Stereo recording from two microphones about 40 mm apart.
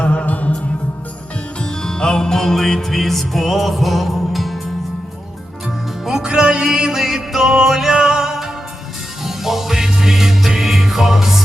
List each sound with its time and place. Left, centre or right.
0.0 s music: left
1.6 s music: centre
6.2 s music: right